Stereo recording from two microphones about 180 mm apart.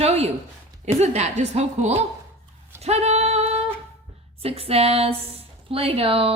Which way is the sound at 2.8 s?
35° right (ahead or behind).